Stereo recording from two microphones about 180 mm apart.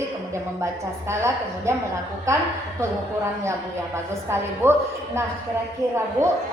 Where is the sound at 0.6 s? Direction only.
15° right (ahead or behind).